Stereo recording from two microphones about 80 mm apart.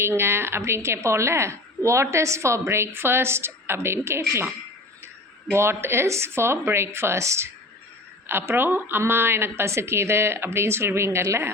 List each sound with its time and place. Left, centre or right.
0.0 s a woman's voice: right
5.5 s a woman's voice: right